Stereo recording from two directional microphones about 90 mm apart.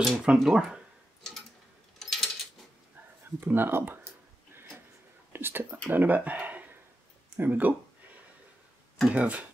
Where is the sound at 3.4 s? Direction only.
25° right (ahead or behind).